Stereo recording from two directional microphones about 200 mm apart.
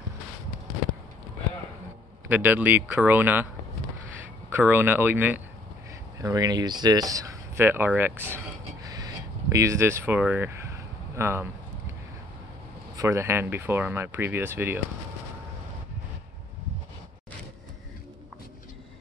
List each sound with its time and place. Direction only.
2.2 s speech: 10° right (ahead or behind)
4.5 s speech: 10° right (ahead or behind)
8.8 s a sound: 15° right (ahead or behind)
12.9 s speech: 15° right (ahead or behind)